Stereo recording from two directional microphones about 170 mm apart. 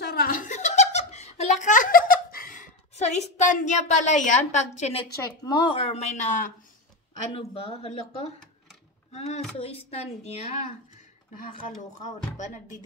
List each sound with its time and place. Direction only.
0.0 s giggle: 65° left (ahead or behind); by 5.0 s 40° left (ahead or behind)
5.4 s speech: 25° left (ahead or behind); by 6.5 s 50° left (ahead or behind)
7.3 s speech: 35° left (ahead or behind)
11.6 s speech: 45° left (ahead or behind)